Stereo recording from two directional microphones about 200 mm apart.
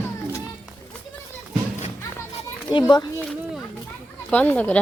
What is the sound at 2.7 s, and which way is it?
Speech, 20° left (ahead or behind).